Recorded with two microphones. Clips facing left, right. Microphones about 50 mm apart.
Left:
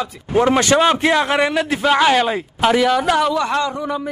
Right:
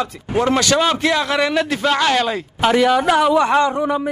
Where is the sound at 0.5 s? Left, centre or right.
Left.